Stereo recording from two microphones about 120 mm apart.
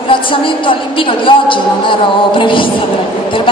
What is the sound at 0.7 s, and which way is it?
Speech, 45° left (ahead or behind).